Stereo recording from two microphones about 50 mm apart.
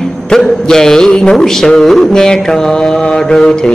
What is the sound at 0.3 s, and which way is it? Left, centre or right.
Music, centre.